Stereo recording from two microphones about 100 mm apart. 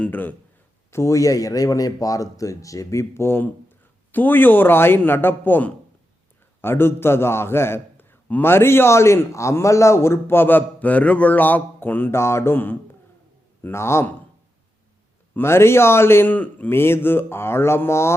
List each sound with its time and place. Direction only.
0.0 s a man's voice: 20° left (ahead or behind)
0.9 s a man's voice: 30° left (ahead or behind)
15.4 s a man's voice: 25° left (ahead or behind)